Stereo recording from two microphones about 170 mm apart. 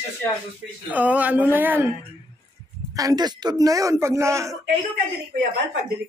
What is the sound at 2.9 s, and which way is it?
Speech, 20° right (ahead or behind).